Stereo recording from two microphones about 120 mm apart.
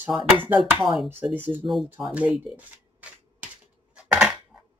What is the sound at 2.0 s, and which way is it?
Speech, 10° right (ahead or behind).